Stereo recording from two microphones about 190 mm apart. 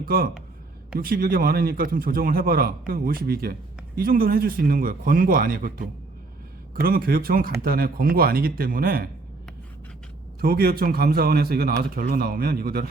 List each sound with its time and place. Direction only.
0.0 s a man's voice: 50° right (ahead or behind)
10.4 s a man's voice: 50° right (ahead or behind)